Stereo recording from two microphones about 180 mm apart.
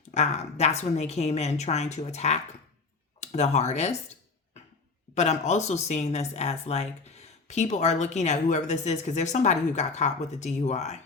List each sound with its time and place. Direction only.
0.1 s speech: 40° left (ahead or behind)
5.1 s speech: 40° left (ahead or behind)